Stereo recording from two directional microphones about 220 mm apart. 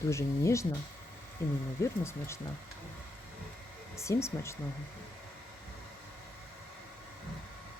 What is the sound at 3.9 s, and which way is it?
Speech, 15° left (ahead or behind).